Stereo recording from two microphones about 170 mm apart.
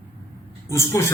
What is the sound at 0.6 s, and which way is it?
Speech, 15° left (ahead or behind).